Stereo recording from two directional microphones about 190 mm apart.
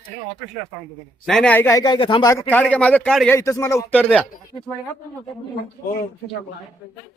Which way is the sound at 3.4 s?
15° left (ahead or behind).